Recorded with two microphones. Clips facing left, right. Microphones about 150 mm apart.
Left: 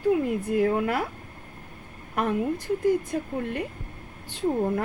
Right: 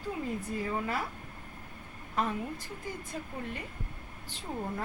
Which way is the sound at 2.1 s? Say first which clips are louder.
Left 7 dB; 60° left (ahead or behind).